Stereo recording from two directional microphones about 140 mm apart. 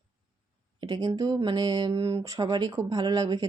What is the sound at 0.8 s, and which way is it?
Speech, 25° right (ahead or behind).